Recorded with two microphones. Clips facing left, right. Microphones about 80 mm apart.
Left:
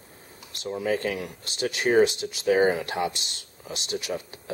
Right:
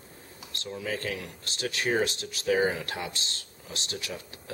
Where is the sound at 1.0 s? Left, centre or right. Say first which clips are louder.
Left 5 dB; centre.